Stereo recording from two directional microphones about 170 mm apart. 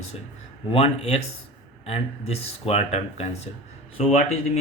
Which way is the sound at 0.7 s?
40° left (ahead or behind).